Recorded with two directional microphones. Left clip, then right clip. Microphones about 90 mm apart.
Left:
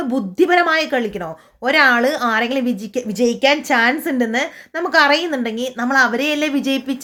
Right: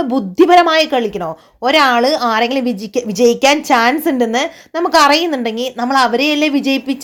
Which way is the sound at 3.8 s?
60° right (ahead or behind).